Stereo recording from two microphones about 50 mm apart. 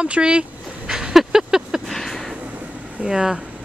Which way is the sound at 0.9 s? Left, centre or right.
Centre.